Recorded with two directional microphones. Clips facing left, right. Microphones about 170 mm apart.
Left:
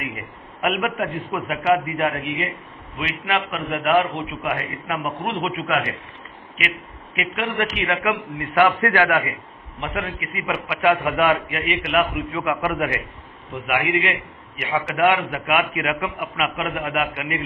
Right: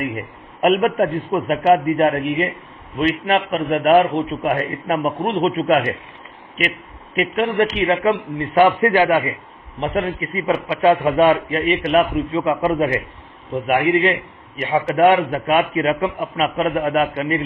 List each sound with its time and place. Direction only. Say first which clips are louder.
0.1 s a man's voice: right 6 dB; 40° right (ahead or behind)
7.2 s a man's voice: right 7 dB; 30° right (ahead or behind)